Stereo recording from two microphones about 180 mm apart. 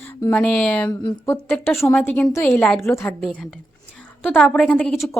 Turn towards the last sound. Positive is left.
turn(degrees=5)  # may be behind; listen again after turning